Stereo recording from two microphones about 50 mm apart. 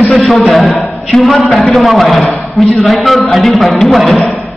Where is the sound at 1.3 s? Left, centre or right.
Centre.